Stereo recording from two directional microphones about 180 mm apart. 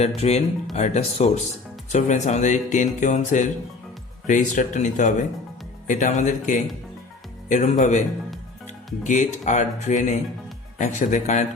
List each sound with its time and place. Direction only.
0.2 s speech: 35° left (ahead or behind)